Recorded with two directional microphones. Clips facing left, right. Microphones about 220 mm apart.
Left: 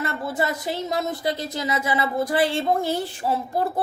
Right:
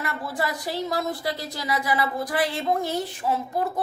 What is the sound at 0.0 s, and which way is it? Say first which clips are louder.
A woman's voice: left 3 dB; 25° left (ahead or behind).